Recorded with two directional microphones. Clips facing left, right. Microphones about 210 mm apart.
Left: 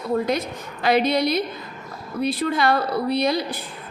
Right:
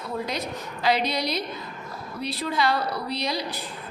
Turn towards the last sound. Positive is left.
turn(degrees=55)  # may be behind; listen again after turning